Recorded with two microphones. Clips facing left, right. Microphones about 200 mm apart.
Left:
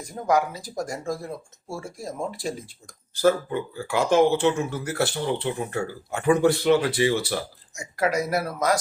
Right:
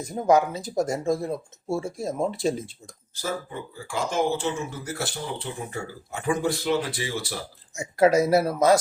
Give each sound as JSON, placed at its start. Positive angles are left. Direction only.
{"t": 0.1, "sound": "speech", "side_deg": -25}
{"t": 3.2, "sound": "speech", "side_deg": 65}
{"t": 7.7, "sound": "speech", "side_deg": -25}